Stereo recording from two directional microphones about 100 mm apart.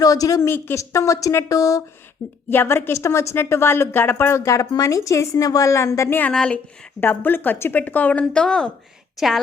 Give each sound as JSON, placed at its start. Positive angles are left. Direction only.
{"t": 0.0, "sound": "a woman's voice", "side_deg": 35}
{"t": 2.5, "sound": "a woman's voice", "side_deg": 20}
{"t": 6.3, "sound": "speech", "side_deg": 5}
{"t": 7.0, "sound": "a woman's voice", "side_deg": 20}